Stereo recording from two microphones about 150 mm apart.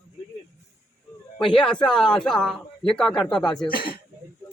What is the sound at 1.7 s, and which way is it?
A man's voice, 5° left (ahead or behind).